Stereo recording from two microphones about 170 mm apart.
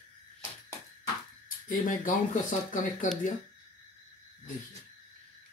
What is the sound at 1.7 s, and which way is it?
Speech, 55° left (ahead or behind).